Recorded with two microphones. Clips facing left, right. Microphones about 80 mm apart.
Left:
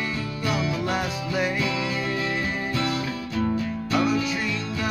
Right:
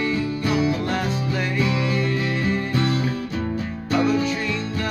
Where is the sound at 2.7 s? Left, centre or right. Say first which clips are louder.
Right 2 dB; right.